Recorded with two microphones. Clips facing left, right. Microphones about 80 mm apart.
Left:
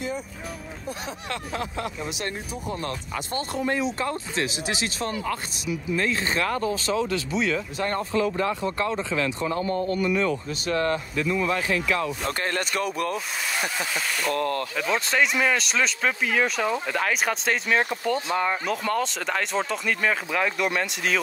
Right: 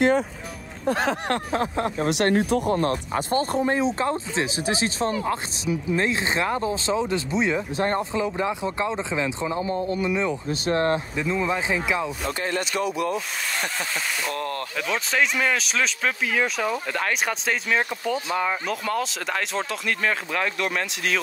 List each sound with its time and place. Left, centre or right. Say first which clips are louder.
0.8 s speech: right 12 dB; right
1.3 s speech: right 6 dB; right
2.0 s speech: right 11 dB; right; by 10.4 s centre
10.5 s speech: right 3 dB; right
11.1 s speech: even; right
12.3 s speech: even; left
14.8 s speech: even; centre